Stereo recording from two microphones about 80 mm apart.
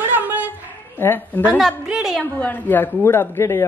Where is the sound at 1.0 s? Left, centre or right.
Left.